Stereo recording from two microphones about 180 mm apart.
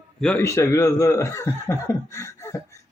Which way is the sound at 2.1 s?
15° left (ahead or behind).